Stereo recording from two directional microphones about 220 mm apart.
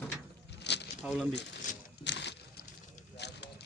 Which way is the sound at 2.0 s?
50° left (ahead or behind).